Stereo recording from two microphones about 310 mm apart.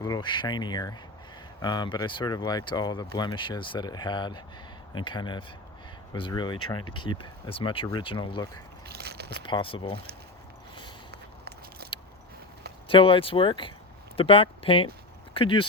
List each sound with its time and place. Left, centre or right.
0.0 s speech: centre
9.0 s speech: right
9.4 s speech: centre
11.1 s biting: right
12.9 s speech: centre